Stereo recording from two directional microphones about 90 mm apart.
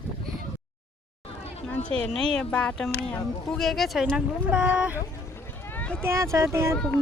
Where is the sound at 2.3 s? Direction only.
10° left (ahead or behind); by 5.0 s 20° right (ahead or behind).